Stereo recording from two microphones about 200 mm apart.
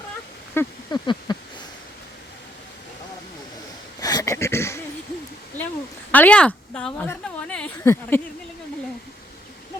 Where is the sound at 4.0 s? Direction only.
20° left (ahead or behind).